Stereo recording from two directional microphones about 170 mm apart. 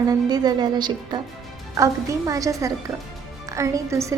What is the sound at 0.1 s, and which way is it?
A woman's voice, 25° right (ahead or behind).